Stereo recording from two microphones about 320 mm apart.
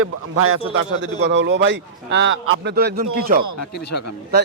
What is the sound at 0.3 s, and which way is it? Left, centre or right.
A man's voice, right.